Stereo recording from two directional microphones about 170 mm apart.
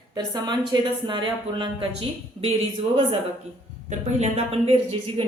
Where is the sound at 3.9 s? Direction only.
40° right (ahead or behind).